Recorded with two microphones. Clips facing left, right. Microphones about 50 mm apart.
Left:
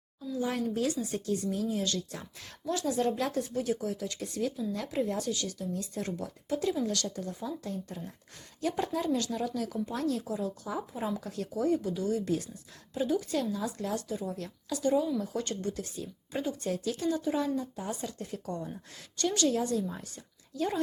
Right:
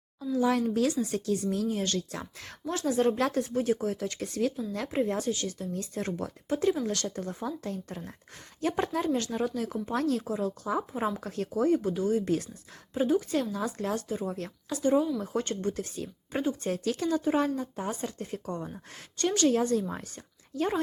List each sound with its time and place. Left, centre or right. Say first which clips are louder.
0.3 s a woman's voice: right 5 dB; right
1.6 s a woman's voice: right 2 dB; right
3.2 s speech: right 4 dB; right
3.5 s speech: right 4 dB; right
4.9 s a woman's voice: right 4 dB; right
9.0 s a woman's voice: right 2 dB; right
9.9 s speech: right 6 dB; right
10.9 s a woman's voice: right 3 dB; right
13.6 s a woman's voice: right 2 dB; right
14.8 s a woman's voice: right 2 dB; right
16.8 s a woman's voice: right 4 dB; right